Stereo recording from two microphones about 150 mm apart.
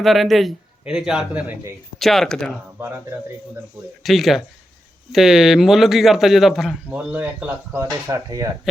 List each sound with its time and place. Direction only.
0.0 s a man's voice: centre (ahead or behind)
2.0 s a man's voice: centre (ahead or behind)
2.7 s speech: 15° right (ahead or behind)
4.0 s a man's voice: centre (ahead or behind); by 8.4 s 25° right (ahead or behind)
8.7 s a man's voice: 5° right (ahead or behind)